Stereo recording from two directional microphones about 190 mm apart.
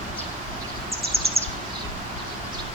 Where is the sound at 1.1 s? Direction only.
30° right (ahead or behind).